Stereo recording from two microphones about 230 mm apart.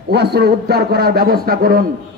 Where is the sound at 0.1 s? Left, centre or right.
Right.